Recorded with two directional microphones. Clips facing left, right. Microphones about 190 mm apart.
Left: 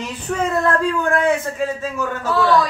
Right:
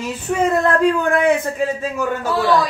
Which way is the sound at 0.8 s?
20° right (ahead or behind).